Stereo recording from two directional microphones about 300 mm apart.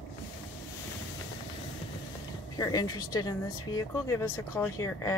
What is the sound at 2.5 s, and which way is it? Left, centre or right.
A woman's voice, centre.